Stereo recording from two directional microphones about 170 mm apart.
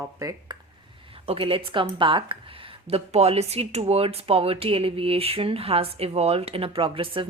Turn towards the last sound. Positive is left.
turn(degrees=-30)  # may be behind; listen again after turning